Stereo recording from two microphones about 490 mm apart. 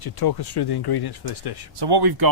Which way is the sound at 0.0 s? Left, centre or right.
Left.